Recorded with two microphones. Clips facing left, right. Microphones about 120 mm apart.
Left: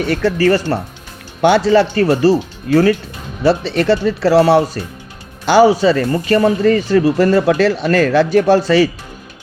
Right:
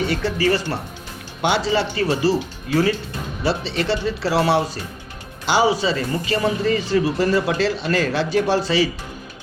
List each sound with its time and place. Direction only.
0.1 s a man's voice: 50° left (ahead or behind)